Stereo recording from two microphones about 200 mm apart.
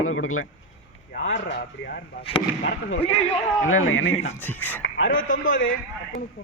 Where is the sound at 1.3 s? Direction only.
60° left (ahead or behind).